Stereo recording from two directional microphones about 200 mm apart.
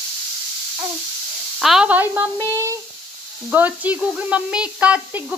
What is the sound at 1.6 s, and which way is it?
Speech, centre (ahead or behind).